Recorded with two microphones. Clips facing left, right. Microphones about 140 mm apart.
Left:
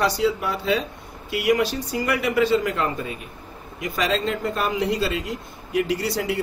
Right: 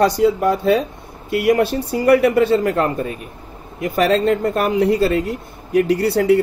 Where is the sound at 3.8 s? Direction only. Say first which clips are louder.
Right 8 dB; 60° right (ahead or behind).